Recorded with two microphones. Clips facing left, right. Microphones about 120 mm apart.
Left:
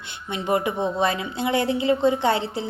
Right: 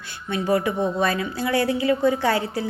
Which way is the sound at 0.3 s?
20° left (ahead or behind).